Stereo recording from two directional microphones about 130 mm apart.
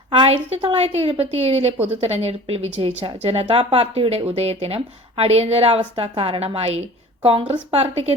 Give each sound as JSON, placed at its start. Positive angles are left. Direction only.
{"t": 0.3, "sound": "speech", "side_deg": -50}